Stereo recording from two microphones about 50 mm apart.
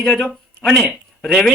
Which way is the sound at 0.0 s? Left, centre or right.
Centre.